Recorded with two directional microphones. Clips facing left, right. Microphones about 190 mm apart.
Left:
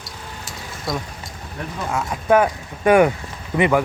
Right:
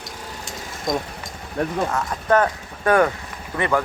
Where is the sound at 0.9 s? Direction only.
20° right (ahead or behind).